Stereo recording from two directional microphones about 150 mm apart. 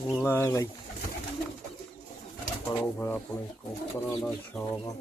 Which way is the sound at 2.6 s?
10° left (ahead or behind).